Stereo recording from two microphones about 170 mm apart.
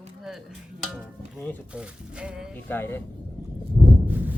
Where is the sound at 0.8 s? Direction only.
5° right (ahead or behind).